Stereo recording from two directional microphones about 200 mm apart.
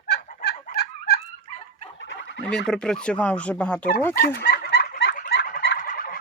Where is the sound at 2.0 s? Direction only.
70° left (ahead or behind).